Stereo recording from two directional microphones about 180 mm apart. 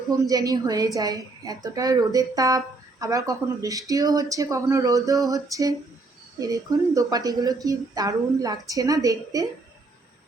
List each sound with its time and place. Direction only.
0.2 s a woman's voice: 20° right (ahead or behind)